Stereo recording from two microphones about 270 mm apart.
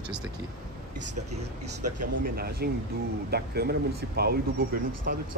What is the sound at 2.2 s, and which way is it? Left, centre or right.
Speech, right.